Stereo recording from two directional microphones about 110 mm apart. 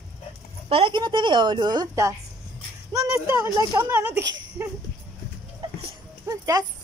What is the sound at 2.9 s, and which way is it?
Speech, 30° right (ahead or behind).